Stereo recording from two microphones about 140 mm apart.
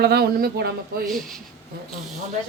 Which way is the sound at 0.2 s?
90° right.